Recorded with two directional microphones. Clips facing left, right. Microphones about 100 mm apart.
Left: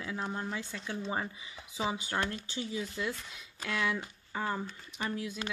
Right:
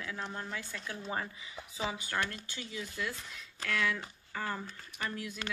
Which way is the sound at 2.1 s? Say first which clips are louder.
Left 2 dB; 25° left (ahead or behind).